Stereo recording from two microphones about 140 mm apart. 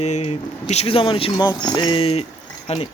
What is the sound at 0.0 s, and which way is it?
A man's voice, 50° left (ahead or behind).